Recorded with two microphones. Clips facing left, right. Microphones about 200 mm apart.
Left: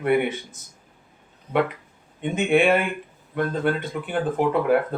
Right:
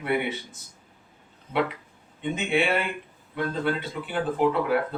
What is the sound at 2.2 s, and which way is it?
Speech, 50° left (ahead or behind).